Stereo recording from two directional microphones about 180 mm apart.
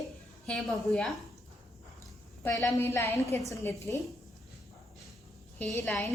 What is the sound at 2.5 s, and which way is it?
A woman's voice, 15° left (ahead or behind).